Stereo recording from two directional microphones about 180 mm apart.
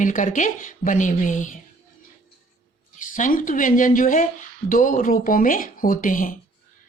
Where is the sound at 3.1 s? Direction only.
45° left (ahead or behind).